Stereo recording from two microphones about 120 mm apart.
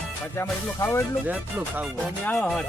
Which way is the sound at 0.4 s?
20° left (ahead or behind).